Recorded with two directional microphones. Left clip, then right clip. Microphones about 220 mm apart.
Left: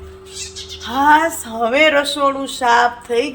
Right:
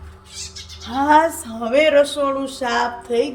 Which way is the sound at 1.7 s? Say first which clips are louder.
Even; 15° left (ahead or behind).